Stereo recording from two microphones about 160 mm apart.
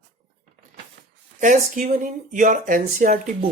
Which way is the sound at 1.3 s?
55° right (ahead or behind).